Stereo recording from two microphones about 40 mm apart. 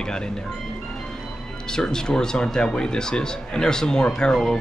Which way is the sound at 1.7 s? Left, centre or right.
Centre.